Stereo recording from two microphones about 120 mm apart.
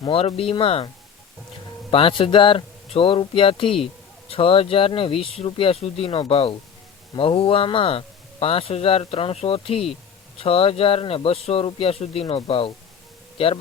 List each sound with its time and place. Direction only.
0.0 s speech: 50° left (ahead or behind)
1.9 s speech: 50° left (ahead or behind)